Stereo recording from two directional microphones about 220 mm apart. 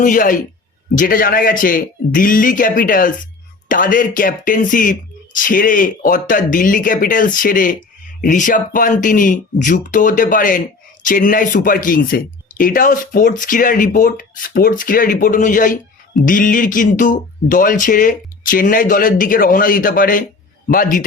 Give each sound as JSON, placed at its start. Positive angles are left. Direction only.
{"t": 0.0, "sound": "speech", "side_deg": 35}